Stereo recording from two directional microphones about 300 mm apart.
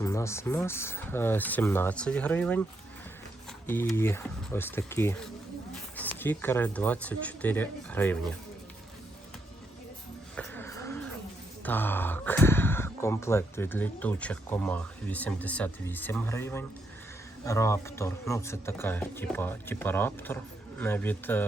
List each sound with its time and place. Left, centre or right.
0.0 s speech: centre
3.7 s speech: centre
10.3 s a sound: centre
11.6 s speech: centre